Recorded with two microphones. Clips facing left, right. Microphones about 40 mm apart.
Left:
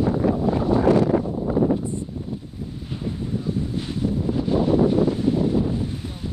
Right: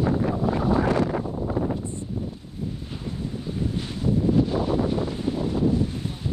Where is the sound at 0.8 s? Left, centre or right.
Right.